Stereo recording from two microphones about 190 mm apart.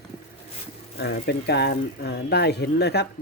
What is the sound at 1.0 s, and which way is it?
Speech, 60° left (ahead or behind).